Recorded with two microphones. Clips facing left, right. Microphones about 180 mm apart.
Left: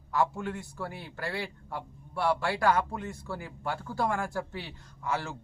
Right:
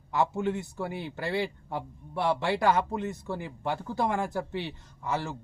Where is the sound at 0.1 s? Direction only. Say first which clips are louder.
Right 2 dB; 20° right (ahead or behind).